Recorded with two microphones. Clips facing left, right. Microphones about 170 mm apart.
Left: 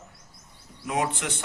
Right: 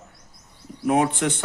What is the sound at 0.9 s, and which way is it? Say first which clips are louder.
Speech: right 8 dB; 55° right (ahead or behind).